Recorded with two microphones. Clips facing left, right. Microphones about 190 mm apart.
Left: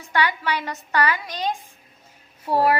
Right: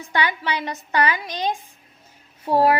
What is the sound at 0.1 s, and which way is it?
A woman's voice, 20° right (ahead or behind).